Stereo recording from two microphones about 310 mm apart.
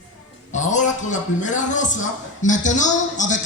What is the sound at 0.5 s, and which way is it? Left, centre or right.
A man's voice, left.